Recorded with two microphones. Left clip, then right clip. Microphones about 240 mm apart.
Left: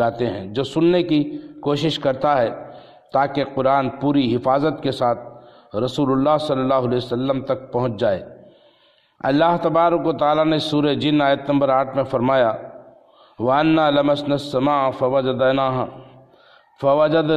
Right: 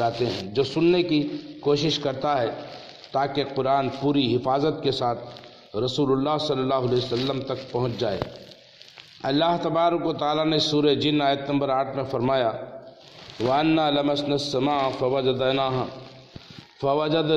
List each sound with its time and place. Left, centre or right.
0.0 s a man's voice: left
9.2 s a man's voice: left